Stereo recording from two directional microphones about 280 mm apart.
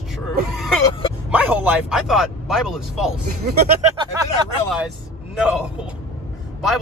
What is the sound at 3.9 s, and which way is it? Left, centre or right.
Speech, centre.